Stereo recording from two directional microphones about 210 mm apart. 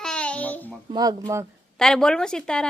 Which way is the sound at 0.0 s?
5° left (ahead or behind).